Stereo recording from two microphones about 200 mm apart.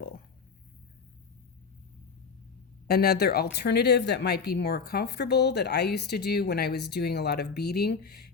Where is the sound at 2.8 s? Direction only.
50° left (ahead or behind).